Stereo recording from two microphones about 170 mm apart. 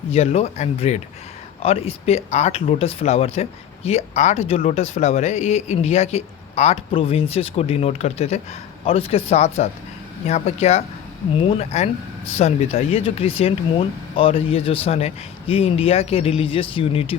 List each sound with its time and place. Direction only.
0.1 s speech: 40° left (ahead or behind)